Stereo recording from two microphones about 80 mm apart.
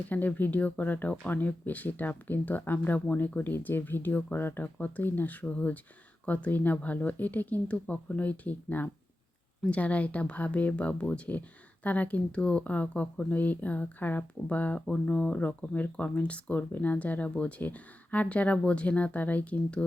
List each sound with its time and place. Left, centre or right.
0.1 s speech: left